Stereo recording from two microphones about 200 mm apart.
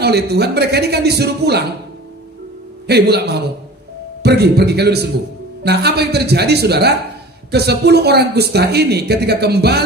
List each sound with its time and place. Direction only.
0.0 s a man's voice: 55° right (ahead or behind)
2.9 s a man's voice: 55° right (ahead or behind)